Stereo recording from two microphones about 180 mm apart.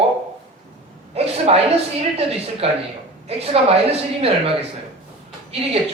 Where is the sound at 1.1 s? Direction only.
35° right (ahead or behind).